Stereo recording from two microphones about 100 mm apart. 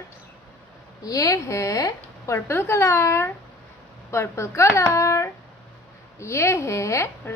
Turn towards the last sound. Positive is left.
turn(degrees=25)  # may be behind; listen again after turning